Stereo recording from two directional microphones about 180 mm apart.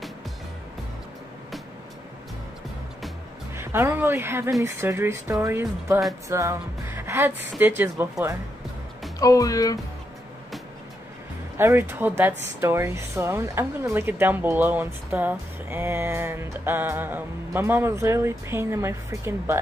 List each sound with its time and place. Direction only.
3.5 s a woman's voice: 15° right (ahead or behind)
9.2 s speech: 20° left (ahead or behind)
11.5 s a woman's voice: 15° right (ahead or behind)